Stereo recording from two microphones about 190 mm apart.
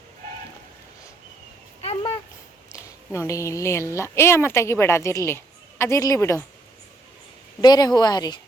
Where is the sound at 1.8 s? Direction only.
30° left (ahead or behind).